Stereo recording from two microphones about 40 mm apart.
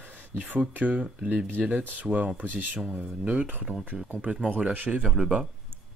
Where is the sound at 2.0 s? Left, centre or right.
Right.